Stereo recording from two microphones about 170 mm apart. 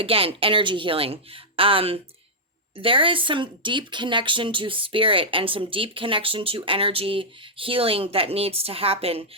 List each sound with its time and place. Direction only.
0.0 s speech: 35° right (ahead or behind)